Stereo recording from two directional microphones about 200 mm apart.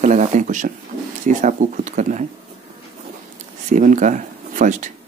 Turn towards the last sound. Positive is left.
turn(degrees=-40)  # may be behind; listen again after turning